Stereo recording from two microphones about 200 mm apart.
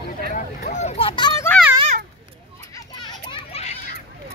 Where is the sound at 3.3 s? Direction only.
30° left (ahead or behind).